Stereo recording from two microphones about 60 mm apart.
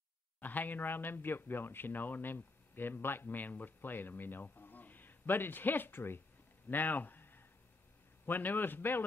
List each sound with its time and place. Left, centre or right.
0.4 s speech: left
6.7 s a sound: left
8.3 s speech: left